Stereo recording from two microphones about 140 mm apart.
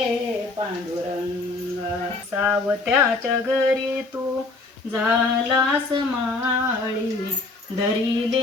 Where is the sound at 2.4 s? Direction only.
15° right (ahead or behind).